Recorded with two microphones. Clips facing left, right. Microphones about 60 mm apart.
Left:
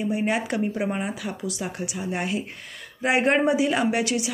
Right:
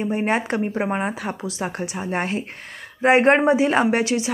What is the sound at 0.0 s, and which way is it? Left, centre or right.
Speech, right.